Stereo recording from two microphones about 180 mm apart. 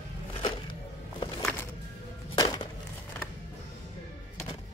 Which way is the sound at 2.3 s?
20° left (ahead or behind).